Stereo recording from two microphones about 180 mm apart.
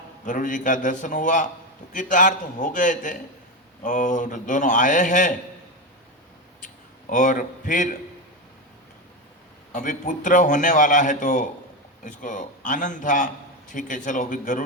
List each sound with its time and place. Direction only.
0.3 s a man's voice: 45° left (ahead or behind)
7.1 s a man's voice: 45° left (ahead or behind)
9.7 s a man's voice: 45° left (ahead or behind)